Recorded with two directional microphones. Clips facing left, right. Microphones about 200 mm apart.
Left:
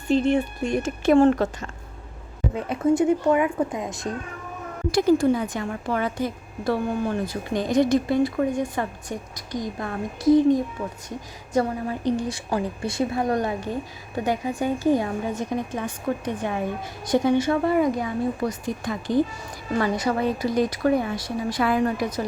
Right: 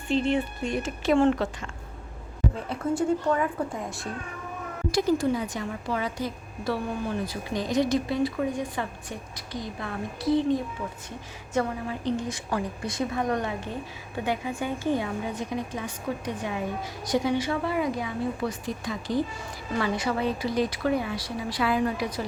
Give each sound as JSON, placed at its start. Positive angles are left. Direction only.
{"t": 0.1, "sound": "a woman's voice", "side_deg": 45}
{"t": 2.6, "sound": "a woman's voice", "side_deg": 20}
{"t": 4.9, "sound": "a woman's voice", "side_deg": 55}